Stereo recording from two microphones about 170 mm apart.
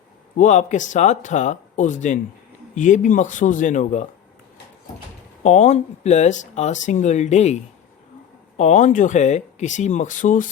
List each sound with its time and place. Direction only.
0.3 s speech: 45° left (ahead or behind)
5.4 s speech: 45° left (ahead or behind)